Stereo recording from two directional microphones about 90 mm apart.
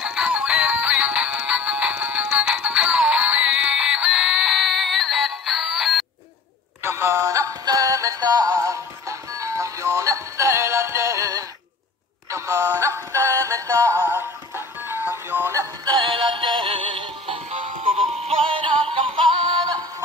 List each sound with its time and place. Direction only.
0.0 s music: 10° right (ahead or behind)
6.8 s synthetic singing: 30° right (ahead or behind)
14.0 s music: 25° right (ahead or behind)
16.0 s synthetic singing: 70° right (ahead or behind)